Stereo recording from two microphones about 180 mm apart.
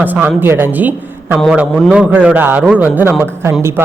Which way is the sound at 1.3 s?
Centre (ahead or behind).